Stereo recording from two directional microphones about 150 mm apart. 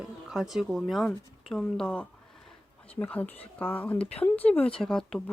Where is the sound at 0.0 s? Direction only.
5° right (ahead or behind).